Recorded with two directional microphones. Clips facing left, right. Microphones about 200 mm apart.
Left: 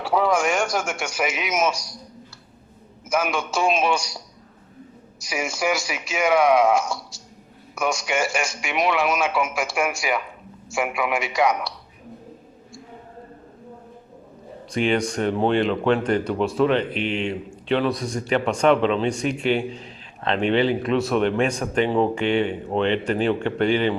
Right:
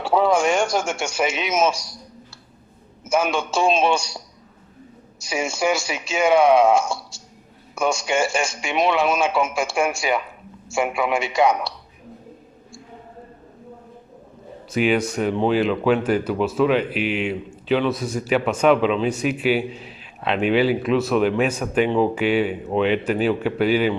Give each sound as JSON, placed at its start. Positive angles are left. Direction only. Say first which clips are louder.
{"t": 0.0, "sound": "a man's voice", "louder": "right 3 dB", "side_deg": -25}
{"t": 3.1, "sound": "a man's voice", "louder": "right 3 dB", "side_deg": -25}
{"t": 5.2, "sound": "a man's voice", "louder": "right 3 dB", "side_deg": -25}
{"t": 14.7, "sound": "speech", "louder": "right 2 dB", "side_deg": -5}